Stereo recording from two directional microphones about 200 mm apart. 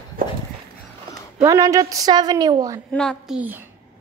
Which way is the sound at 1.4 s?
15° right (ahead or behind).